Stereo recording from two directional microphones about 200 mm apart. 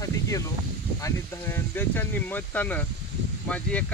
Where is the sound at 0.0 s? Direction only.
15° left (ahead or behind).